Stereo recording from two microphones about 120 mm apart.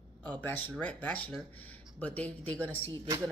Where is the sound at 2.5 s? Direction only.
15° left (ahead or behind).